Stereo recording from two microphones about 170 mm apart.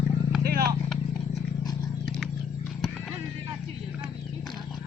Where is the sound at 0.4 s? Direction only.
65° right (ahead or behind).